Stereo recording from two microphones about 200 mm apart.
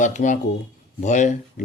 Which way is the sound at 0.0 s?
40° left (ahead or behind).